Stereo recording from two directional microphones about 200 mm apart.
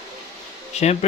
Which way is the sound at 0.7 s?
35° left (ahead or behind).